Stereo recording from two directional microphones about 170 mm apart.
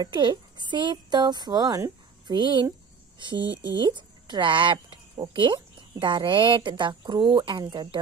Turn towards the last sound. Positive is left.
turn(degrees=-25)  # may be behind; listen again after turning